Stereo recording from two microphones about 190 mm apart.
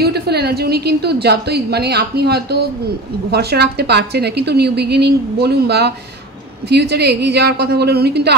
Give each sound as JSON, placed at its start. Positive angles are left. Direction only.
{"t": 0.0, "sound": "a woman's voice", "side_deg": -60}